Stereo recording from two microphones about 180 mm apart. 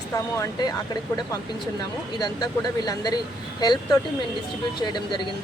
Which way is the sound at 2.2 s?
20° left (ahead or behind).